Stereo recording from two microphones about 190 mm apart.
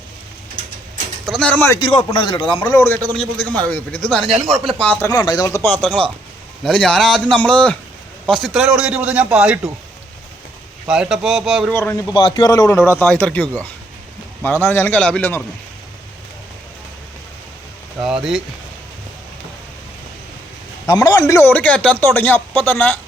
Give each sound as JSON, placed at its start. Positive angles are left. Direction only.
{"t": 1.3, "sound": "a man's voice", "side_deg": 5}
{"t": 1.8, "sound": "a man's voice", "side_deg": 25}
{"t": 2.7, "sound": "a man's voice", "side_deg": 15}
{"t": 10.8, "sound": "a man's voice", "side_deg": -5}
{"t": 11.7, "sound": "a man's voice", "side_deg": 15}
{"t": 14.6, "sound": "a man's voice", "side_deg": 10}
{"t": 18.0, "sound": "a man's voice", "side_deg": 0}
{"t": 20.8, "sound": "a man's voice", "side_deg": 20}